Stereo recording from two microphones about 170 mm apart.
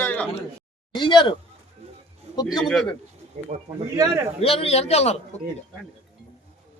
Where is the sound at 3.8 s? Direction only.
20° right (ahead or behind).